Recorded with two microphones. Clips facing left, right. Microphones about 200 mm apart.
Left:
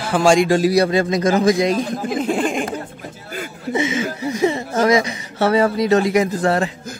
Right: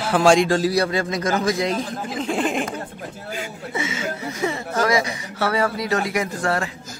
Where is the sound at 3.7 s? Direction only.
20° left (ahead or behind).